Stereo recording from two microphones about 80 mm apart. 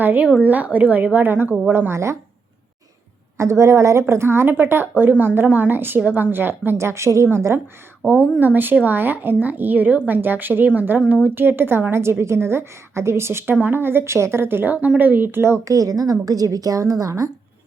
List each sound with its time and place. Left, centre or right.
0.0 s a woman's voice: right
1.9 s speech: right
3.3 s a woman's voice: right
15.7 s a woman's voice: right